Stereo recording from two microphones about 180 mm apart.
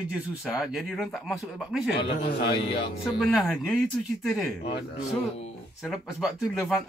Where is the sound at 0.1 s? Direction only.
5° right (ahead or behind).